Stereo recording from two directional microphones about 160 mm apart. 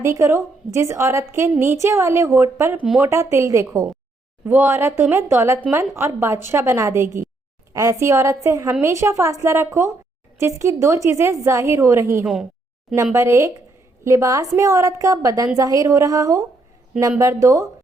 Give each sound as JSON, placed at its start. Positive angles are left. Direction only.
{"t": 0.0, "sound": "a woman's voice", "side_deg": -15}
{"t": 12.2, "sound": "a woman's voice", "side_deg": -5}
{"t": 13.1, "sound": "a woman's voice", "side_deg": -15}